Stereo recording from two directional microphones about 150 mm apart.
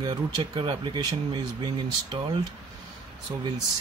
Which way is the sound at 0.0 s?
30° right (ahead or behind).